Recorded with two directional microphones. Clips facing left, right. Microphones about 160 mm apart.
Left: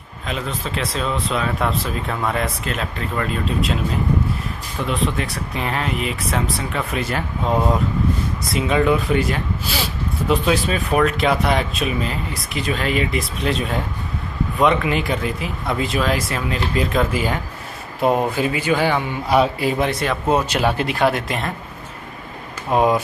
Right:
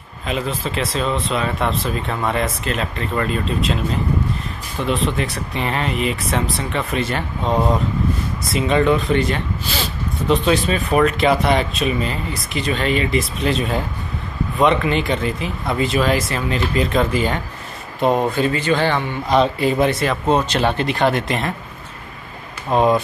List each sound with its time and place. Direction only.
0.3 s speech: centre (ahead or behind)
22.7 s speech: 10° left (ahead or behind)